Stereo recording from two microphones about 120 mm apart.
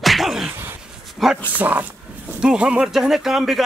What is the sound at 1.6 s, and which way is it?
Speech, 15° right (ahead or behind).